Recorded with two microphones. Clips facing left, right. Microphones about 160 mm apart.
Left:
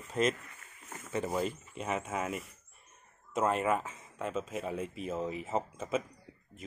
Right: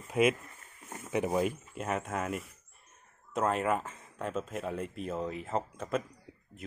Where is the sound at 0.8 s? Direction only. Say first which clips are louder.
Right 3 dB; 15° right (ahead or behind).